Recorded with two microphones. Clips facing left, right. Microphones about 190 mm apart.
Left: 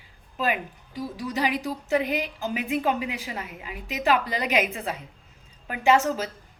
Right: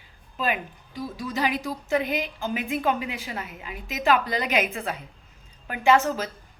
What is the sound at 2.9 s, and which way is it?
Speech, 35° right (ahead or behind).